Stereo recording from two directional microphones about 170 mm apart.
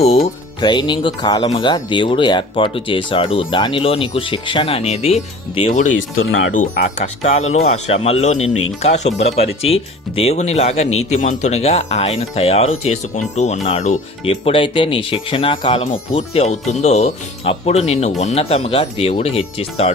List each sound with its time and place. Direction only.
0.6 s speech: 25° left (ahead or behind)
6.5 s a man's voice: 50° left (ahead or behind)
14.3 s a man's voice: 30° left (ahead or behind)